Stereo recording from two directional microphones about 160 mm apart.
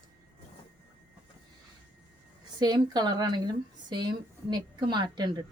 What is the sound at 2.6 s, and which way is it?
Speech, 25° right (ahead or behind).